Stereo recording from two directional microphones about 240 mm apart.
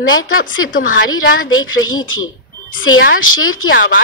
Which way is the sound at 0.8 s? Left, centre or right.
Left.